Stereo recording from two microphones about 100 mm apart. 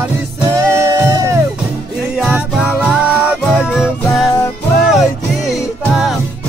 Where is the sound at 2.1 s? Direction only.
10° right (ahead or behind).